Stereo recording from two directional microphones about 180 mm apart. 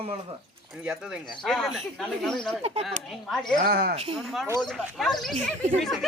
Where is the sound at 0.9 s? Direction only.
5° right (ahead or behind).